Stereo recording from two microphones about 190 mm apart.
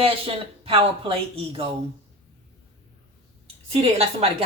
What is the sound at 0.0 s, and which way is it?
Speech, 30° right (ahead or behind).